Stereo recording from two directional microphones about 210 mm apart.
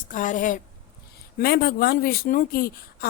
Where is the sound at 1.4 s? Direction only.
50° left (ahead or behind).